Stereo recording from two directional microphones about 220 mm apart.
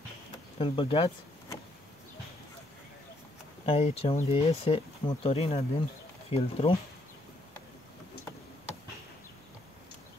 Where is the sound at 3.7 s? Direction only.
30° left (ahead or behind).